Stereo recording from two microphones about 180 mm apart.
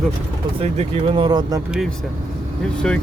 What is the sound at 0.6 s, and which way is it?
Speech, 35° right (ahead or behind).